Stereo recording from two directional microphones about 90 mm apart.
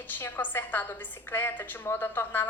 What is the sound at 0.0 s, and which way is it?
A woman's voice, 20° left (ahead or behind).